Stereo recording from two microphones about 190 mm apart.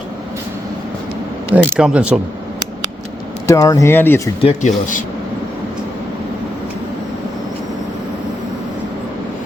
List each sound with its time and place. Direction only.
1.6 s speech: centre (ahead or behind)
3.4 s speech: 15° left (ahead or behind)
4.4 s speech: 35° left (ahead or behind)